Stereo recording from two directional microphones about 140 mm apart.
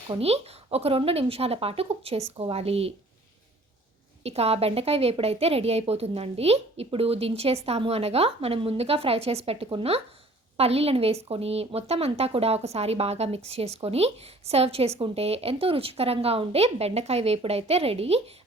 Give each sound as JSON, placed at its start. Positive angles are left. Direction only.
{"t": 0.1, "sound": "speech", "side_deg": -45}
{"t": 4.2, "sound": "speech", "side_deg": -45}